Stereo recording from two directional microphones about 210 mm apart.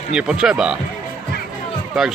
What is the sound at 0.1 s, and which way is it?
Speech, 5° right (ahead or behind).